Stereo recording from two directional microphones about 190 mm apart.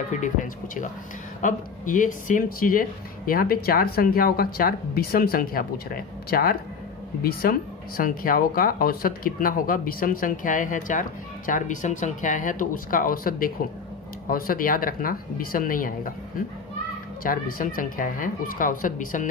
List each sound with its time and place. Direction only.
0.2 s speech: 45° left (ahead or behind)
8.0 s speech: 45° left (ahead or behind)